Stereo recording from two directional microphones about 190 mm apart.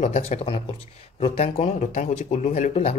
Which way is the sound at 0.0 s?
35° left (ahead or behind).